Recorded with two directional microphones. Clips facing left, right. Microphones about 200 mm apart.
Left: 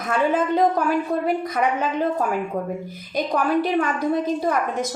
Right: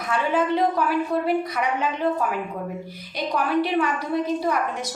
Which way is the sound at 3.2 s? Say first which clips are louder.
Left 2 dB; 45° left (ahead or behind).